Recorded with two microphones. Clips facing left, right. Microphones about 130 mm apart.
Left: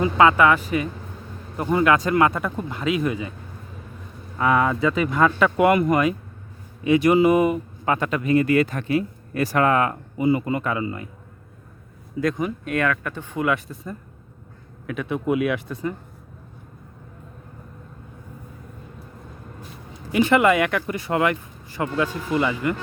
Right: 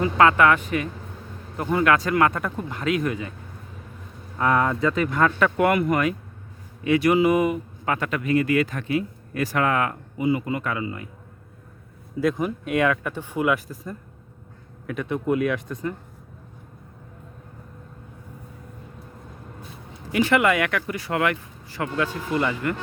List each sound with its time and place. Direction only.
0.0 s speech: 15° left (ahead or behind)
1.6 s speech: 20° left (ahead or behind)
2.3 s speech: 10° left (ahead or behind)
4.4 s speech: 5° left (ahead or behind); by 11.1 s 30° left (ahead or behind)
12.2 s speech: 5° right (ahead or behind)
20.1 s speech: 25° left (ahead or behind)